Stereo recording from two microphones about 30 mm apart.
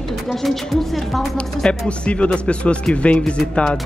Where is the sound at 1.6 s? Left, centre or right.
Left.